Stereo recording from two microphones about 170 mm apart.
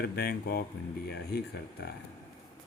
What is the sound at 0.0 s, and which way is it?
Speech, 65° left (ahead or behind).